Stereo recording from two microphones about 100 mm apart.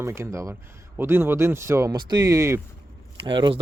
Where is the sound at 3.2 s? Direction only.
50° right (ahead or behind).